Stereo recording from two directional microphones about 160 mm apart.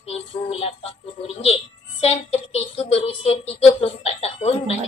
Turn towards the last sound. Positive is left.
turn(degrees=40)  # may be behind; listen again after turning